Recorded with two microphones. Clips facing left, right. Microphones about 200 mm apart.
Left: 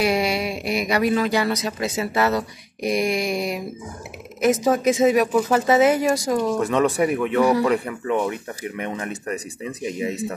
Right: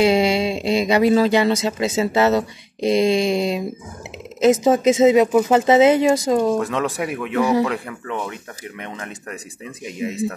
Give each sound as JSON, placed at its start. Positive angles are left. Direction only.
{"t": 0.0, "sound": "speech", "side_deg": -25}
{"t": 6.6, "sound": "speech", "side_deg": 0}